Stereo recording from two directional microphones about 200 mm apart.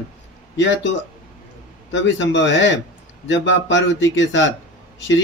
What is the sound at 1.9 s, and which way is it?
Speech, 65° left (ahead or behind).